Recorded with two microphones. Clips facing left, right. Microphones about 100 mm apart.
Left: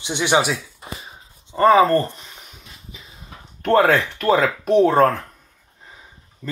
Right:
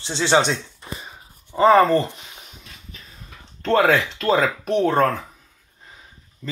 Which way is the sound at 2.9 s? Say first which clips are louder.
Left 1 dB; 15° left (ahead or behind).